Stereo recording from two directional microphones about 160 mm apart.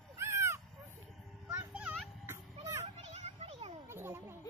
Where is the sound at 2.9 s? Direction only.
40° right (ahead or behind).